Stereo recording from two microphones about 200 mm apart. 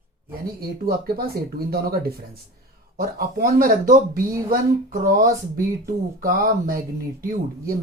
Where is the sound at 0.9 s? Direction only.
50° right (ahead or behind).